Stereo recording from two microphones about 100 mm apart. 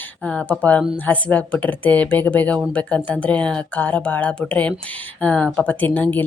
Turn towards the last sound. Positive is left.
turn(degrees=20)  # may be behind; listen again after turning